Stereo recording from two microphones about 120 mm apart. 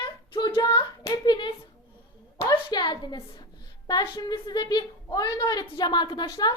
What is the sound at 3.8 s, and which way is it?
A woman's voice, 40° left (ahead or behind).